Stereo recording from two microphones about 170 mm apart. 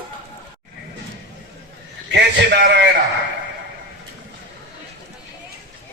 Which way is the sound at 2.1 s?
85° right.